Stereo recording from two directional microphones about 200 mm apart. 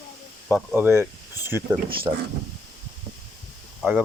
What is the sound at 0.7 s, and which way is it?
Speech, 10° right (ahead or behind).